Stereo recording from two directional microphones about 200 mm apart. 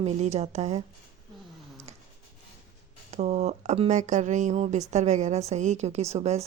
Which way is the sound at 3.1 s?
35° right (ahead or behind).